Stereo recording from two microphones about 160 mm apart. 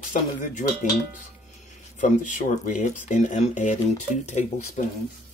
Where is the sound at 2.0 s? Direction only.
50° left (ahead or behind).